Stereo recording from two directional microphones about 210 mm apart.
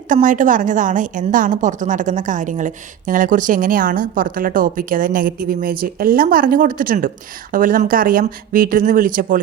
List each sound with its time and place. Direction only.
0.1 s a woman's voice: 40° right (ahead or behind)